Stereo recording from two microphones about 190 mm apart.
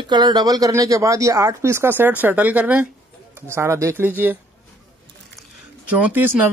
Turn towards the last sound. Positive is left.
turn(degrees=-10)  # may be behind; listen again after turning